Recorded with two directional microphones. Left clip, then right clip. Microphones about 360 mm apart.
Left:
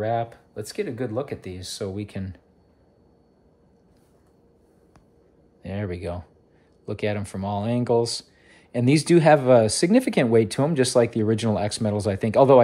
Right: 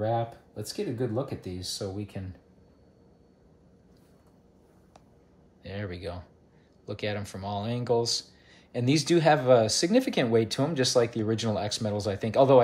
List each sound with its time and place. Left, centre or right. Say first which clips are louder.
0.3 s speech: left 4 dB; centre
1.8 s speech: left 5 dB; left
5.6 s speech: left 6 dB; centre